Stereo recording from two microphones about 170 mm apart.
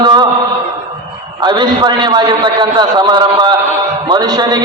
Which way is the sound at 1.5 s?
25° right (ahead or behind).